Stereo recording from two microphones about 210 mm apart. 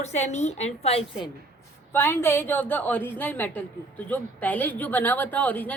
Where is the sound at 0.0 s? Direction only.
35° left (ahead or behind).